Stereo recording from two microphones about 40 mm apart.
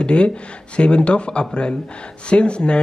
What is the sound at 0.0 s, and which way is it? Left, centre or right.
Speech, left.